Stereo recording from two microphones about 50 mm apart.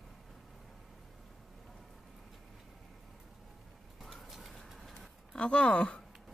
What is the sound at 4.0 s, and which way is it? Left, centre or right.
Bird, centre.